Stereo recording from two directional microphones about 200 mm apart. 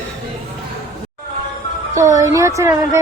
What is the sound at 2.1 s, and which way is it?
Speech, 15° right (ahead or behind).